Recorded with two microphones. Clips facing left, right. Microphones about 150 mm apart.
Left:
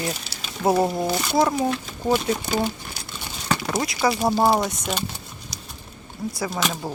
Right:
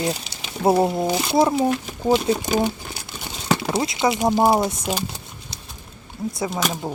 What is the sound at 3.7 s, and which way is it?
Speech, 25° right (ahead or behind).